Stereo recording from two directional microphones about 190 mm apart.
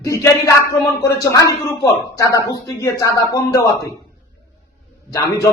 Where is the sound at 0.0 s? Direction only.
15° left (ahead or behind).